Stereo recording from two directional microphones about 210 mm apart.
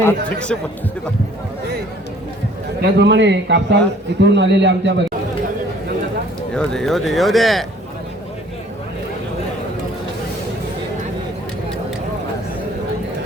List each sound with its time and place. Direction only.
0.0 s speech: 5° left (ahead or behind)
3.0 s a man's voice: 55° right (ahead or behind)
6.5 s speech: 5° left (ahead or behind)